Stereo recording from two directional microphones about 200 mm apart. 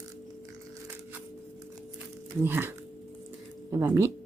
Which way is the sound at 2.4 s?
10° right (ahead or behind).